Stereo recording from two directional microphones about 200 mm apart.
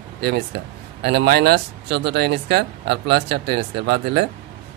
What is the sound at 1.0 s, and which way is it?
Speech, 55° right (ahead or behind).